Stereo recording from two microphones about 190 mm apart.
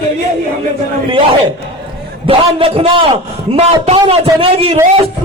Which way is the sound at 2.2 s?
30° right (ahead or behind).